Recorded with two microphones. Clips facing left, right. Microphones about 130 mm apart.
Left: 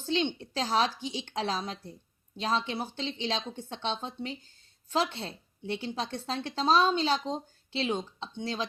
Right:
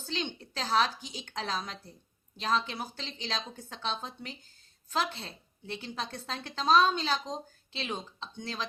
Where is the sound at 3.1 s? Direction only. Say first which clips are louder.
Left 5 dB; 40° right (ahead or behind).